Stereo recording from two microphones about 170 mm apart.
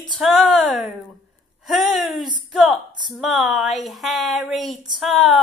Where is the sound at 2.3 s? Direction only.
5° right (ahead or behind).